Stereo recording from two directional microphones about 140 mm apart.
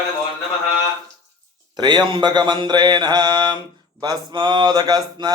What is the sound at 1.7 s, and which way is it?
Mantra, 30° right (ahead or behind).